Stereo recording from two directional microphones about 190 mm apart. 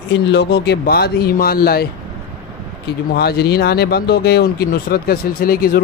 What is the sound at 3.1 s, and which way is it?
Speech, 55° left (ahead or behind).